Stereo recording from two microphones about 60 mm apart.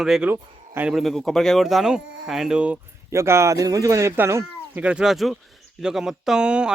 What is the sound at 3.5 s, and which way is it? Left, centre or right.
Speech, right.